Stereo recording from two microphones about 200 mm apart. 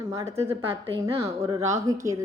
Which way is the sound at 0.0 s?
15° right (ahead or behind).